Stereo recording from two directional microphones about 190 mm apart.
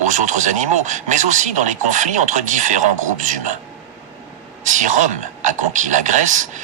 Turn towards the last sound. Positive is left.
turn(degrees=-40)  # may be behind; listen again after turning